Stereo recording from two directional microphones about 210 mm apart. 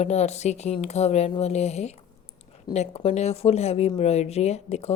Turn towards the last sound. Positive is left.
turn(degrees=30)  # may be behind; listen again after turning